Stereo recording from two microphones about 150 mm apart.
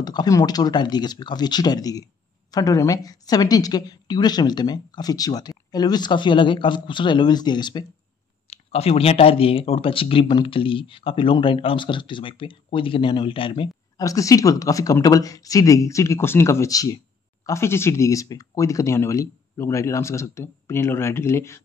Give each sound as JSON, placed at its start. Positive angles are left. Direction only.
{"t": 0.0, "sound": "a woman's voice", "side_deg": 25}
{"t": 8.5, "sound": "a woman's voice", "side_deg": 40}